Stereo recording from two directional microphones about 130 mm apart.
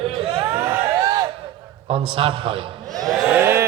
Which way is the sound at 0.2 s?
45° right (ahead or behind).